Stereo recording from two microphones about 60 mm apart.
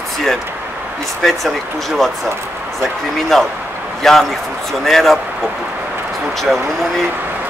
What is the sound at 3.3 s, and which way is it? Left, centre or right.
Speech, centre.